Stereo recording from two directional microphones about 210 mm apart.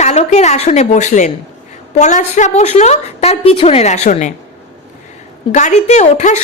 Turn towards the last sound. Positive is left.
turn(degrees=35)  # may be behind; listen again after turning